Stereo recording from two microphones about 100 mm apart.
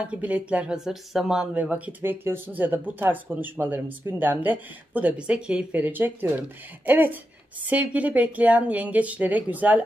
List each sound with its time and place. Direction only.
0.0 s speech: 15° right (ahead or behind)